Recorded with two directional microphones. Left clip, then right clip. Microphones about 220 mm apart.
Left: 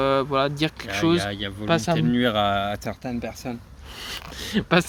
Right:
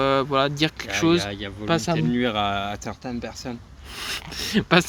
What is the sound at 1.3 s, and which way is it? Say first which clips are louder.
Speech: left 2 dB; 40° left (ahead or behind).